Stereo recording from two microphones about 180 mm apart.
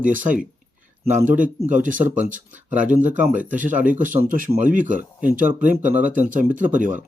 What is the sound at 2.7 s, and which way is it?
Speech, 10° right (ahead or behind).